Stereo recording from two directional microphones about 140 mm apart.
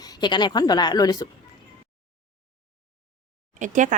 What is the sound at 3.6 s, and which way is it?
Speech, 65° right (ahead or behind).